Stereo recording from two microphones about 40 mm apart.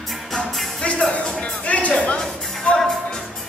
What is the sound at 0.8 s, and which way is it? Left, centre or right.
Music, left.